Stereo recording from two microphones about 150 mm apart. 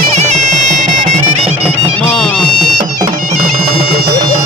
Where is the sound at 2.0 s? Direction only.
5° left (ahead or behind).